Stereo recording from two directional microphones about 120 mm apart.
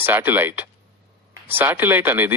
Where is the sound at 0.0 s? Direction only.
20° right (ahead or behind).